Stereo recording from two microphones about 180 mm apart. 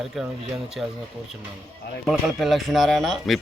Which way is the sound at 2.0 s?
Centre (ahead or behind).